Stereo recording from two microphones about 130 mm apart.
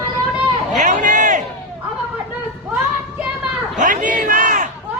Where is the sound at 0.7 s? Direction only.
75° right (ahead or behind).